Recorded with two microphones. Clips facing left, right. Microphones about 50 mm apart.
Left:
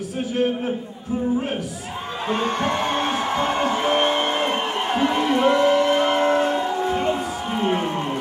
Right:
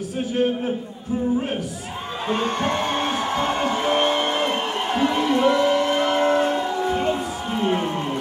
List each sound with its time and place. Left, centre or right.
2.2 s music: centre
4.8 s a sound: left
6.8 s music: centre